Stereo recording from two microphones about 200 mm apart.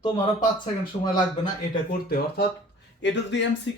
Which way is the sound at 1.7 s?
45° left (ahead or behind).